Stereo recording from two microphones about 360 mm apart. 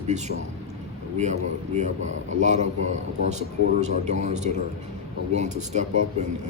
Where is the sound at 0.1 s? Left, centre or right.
Centre.